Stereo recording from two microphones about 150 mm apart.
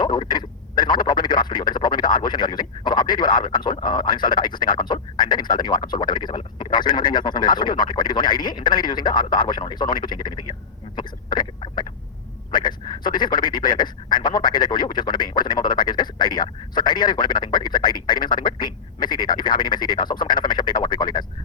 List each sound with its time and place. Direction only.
0.0 s speech: 30° left (ahead or behind)
10.9 s a sound: 30° left (ahead or behind)
12.5 s speech: 30° left (ahead or behind)